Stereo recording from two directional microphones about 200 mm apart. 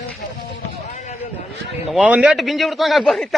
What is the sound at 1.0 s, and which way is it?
Speech, 35° left (ahead or behind).